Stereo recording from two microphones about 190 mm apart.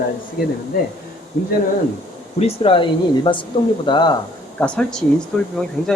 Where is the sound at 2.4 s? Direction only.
25° left (ahead or behind).